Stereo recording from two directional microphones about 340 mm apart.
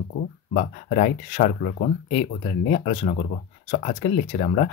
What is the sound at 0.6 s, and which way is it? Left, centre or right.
Speech, left.